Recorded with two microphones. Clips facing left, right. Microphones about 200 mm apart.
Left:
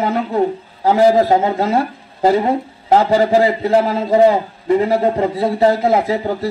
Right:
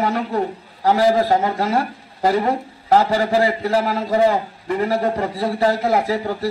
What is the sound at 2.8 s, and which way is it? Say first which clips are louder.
A man's voice: left 3 dB; 20° left (ahead or behind).